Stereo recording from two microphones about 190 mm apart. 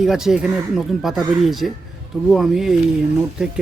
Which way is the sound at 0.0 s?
5° right (ahead or behind).